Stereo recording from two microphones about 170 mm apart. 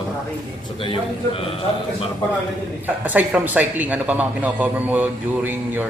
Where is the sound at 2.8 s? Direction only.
10° right (ahead or behind).